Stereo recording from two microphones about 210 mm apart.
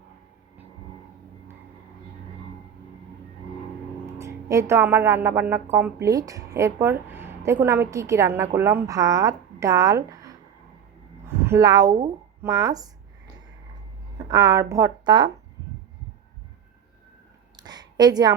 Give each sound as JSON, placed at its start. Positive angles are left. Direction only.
{"t": 4.0, "sound": "a woman's voice", "side_deg": -15}
{"t": 14.3, "sound": "speech", "side_deg": -15}
{"t": 17.6, "sound": "a sound", "side_deg": -20}